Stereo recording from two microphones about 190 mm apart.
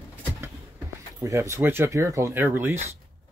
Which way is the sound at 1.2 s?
15° right (ahead or behind).